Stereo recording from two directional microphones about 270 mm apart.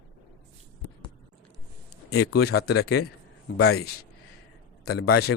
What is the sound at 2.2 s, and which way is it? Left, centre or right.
Speech, left.